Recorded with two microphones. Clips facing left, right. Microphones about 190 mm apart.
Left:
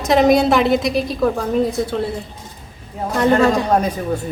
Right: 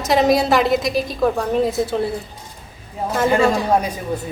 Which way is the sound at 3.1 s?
5° right (ahead or behind).